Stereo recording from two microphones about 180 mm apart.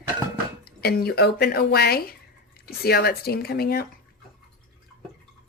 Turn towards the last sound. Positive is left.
turn(degrees=60)  # may be behind; listen again after turning